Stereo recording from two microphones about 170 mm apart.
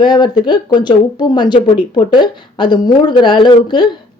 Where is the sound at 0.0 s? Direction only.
25° left (ahead or behind).